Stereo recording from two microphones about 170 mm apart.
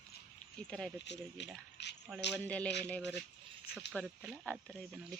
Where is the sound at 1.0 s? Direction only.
90° left.